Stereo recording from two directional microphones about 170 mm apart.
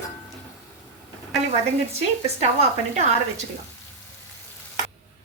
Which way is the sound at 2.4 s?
40° right (ahead or behind).